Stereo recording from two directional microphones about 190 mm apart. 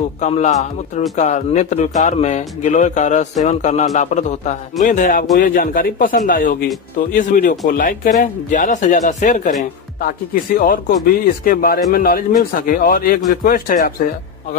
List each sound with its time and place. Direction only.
0.2 s a man's voice: 35° left (ahead or behind)